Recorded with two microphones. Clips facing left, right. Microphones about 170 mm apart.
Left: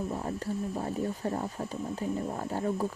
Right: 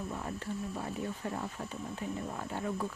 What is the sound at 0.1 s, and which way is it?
Speech, 35° left (ahead or behind).